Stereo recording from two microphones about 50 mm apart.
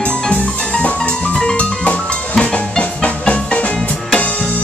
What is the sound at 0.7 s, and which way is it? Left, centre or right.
Music, left.